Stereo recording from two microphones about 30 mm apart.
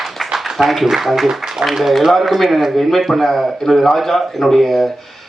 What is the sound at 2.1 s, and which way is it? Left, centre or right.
A man's voice, centre.